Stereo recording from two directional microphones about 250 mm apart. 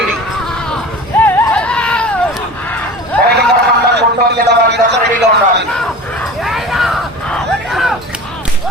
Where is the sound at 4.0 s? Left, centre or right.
Right.